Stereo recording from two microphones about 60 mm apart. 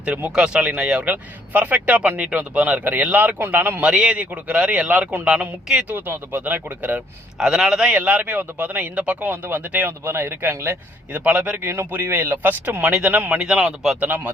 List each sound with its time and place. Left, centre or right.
0.0 s speech: right
3.8 s speech: centre
5.9 s speech: right
7.3 s a man's voice: centre
7.9 s speech: right
10.0 s speech: right
11.1 s speech: right
13.4 s a man's voice: centre
14.0 s speech: right